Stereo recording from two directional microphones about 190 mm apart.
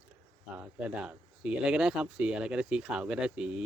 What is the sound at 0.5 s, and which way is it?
Speech, 5° right (ahead or behind).